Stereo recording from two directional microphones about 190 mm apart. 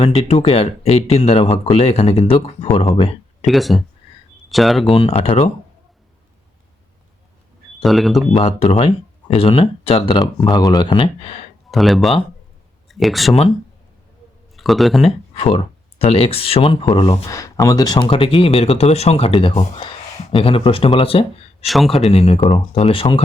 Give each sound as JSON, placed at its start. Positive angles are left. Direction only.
{"t": 0.0, "sound": "speech", "side_deg": 30}
{"t": 3.4, "sound": "speech", "side_deg": 0}
{"t": 4.9, "sound": "speech", "side_deg": 30}
{"t": 7.8, "sound": "speech", "side_deg": 0}
{"t": 8.4, "sound": "speech", "side_deg": 30}
{"t": 11.7, "sound": "speech", "side_deg": 0}
{"t": 14.5, "sound": "speech", "side_deg": 0}
{"t": 15.0, "sound": "speech", "side_deg": 30}
{"t": 21.7, "sound": "speech", "side_deg": 0}
{"t": 22.1, "sound": "speech", "side_deg": 30}